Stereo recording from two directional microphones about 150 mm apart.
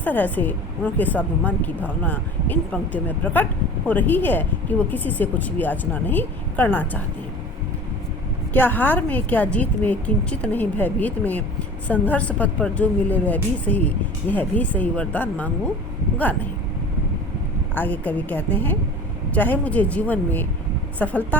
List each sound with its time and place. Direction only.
0.0 s a woman's voice: 10° left (ahead or behind)
8.5 s a woman's voice: 10° left (ahead or behind)
17.7 s a woman's voice: 10° left (ahead or behind)